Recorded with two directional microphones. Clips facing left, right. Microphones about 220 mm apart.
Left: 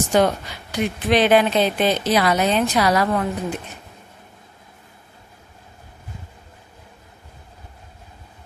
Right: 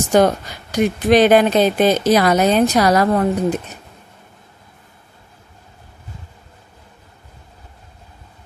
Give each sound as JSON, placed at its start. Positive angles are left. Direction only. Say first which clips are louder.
{"t": 0.1, "sound": "speech", "louder": "right 5 dB", "side_deg": -45}